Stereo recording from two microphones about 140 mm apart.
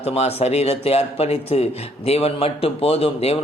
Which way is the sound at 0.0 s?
45° left (ahead or behind).